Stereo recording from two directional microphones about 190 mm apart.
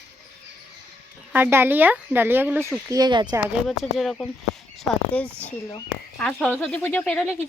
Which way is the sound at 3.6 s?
Centre (ahead or behind).